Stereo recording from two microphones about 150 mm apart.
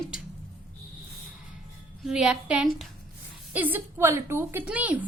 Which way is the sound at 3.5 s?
10° right (ahead or behind).